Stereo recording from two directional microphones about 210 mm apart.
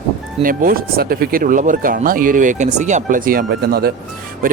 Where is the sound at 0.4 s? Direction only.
40° right (ahead or behind).